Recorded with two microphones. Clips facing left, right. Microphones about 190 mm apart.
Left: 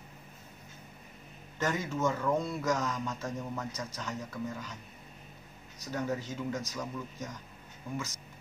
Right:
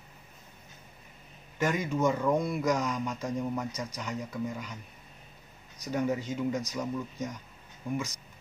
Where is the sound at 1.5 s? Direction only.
15° right (ahead or behind).